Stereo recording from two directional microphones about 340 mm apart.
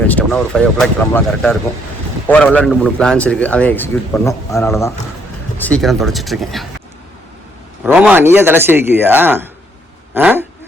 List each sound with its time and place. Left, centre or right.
0.1 s a man's voice: centre
7.9 s a man's voice: centre